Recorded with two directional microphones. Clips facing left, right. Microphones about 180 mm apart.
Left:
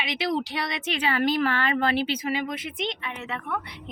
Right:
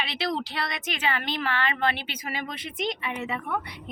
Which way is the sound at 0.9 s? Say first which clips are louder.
Left 8 dB; 35° left (ahead or behind).